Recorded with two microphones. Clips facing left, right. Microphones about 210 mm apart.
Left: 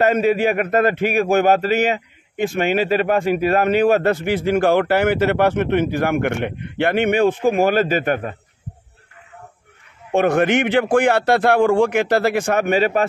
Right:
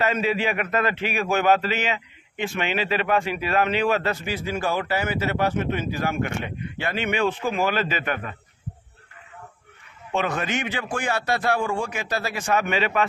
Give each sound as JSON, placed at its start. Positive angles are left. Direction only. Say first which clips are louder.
{"t": 0.0, "sound": "a man's voice", "louder": "left 7 dB", "side_deg": 50}
{"t": 10.1, "sound": "a man's voice", "louder": "left 10 dB", "side_deg": 55}